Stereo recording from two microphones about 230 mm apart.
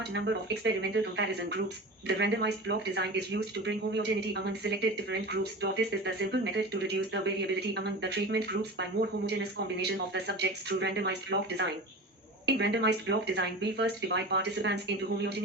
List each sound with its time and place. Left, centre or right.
0.1 s speech: right